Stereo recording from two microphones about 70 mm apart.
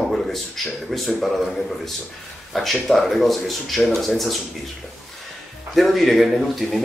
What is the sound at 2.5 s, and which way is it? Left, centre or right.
Speech, centre.